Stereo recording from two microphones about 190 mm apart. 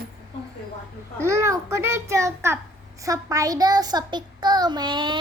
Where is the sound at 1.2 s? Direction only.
15° right (ahead or behind).